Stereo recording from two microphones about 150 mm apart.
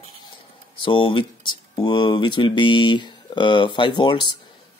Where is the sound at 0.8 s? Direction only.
35° left (ahead or behind).